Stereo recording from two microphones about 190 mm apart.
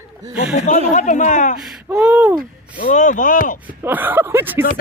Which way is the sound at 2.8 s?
45° left (ahead or behind).